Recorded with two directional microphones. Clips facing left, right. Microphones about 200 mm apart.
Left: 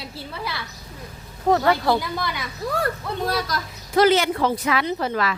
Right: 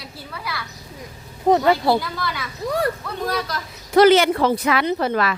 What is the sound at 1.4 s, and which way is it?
Speech, 20° right (ahead or behind).